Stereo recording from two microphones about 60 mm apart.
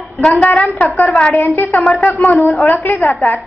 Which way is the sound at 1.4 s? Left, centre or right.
Left.